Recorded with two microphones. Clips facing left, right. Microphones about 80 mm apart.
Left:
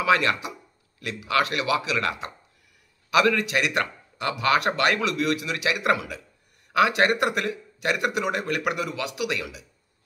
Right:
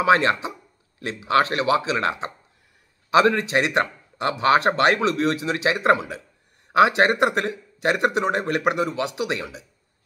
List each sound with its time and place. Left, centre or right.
0.0 s speech: right